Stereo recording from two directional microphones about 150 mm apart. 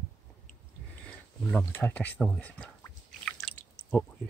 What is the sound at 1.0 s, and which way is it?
Speech, 5° left (ahead or behind).